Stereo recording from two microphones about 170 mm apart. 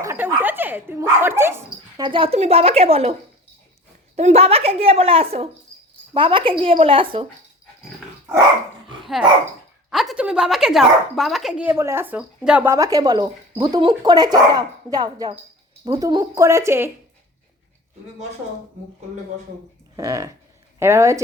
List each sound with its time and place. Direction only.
0.0 s speech: 15° right (ahead or behind)
2.0 s a woman's voice: 30° right (ahead or behind)
9.9 s speech: centre (ahead or behind)
11.7 s speech: 15° right (ahead or behind)
20.0 s a woman's voice: 20° right (ahead or behind)